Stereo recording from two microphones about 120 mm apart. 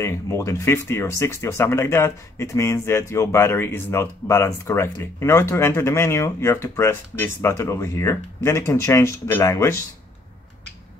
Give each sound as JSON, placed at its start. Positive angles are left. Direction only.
{"t": 0.0, "sound": "speech", "side_deg": 20}